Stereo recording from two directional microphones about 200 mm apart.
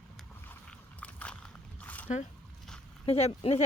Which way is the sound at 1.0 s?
5° left (ahead or behind).